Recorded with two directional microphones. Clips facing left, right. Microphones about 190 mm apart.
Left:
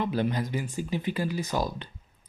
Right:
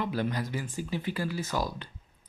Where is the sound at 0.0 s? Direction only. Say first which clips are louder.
Left 3 dB; 20° left (ahead or behind).